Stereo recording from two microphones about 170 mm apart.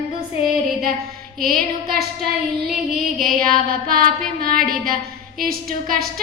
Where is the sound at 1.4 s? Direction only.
60° right (ahead or behind).